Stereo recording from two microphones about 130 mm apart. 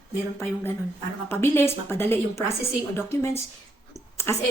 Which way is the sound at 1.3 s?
15° left (ahead or behind).